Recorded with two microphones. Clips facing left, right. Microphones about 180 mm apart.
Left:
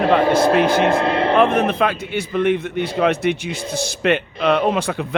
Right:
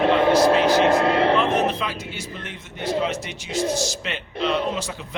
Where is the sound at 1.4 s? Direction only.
55° left (ahead or behind).